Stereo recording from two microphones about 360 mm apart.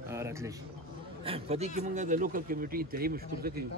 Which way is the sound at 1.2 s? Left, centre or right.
Centre.